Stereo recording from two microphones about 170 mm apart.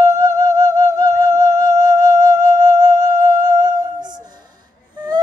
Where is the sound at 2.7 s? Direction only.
25° right (ahead or behind).